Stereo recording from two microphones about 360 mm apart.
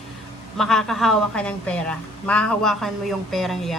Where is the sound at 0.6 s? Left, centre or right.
Centre.